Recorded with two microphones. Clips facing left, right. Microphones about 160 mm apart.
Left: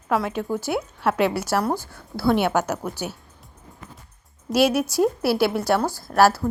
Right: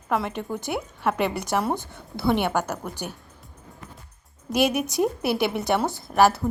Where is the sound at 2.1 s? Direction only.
20° right (ahead or behind).